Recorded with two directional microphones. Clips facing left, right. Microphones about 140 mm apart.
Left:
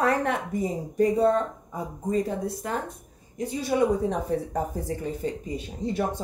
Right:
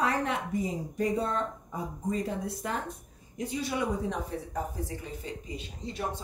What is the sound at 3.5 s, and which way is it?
Speech, 40° left (ahead or behind).